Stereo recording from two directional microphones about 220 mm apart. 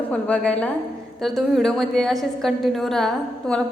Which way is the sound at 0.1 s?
5° left (ahead or behind).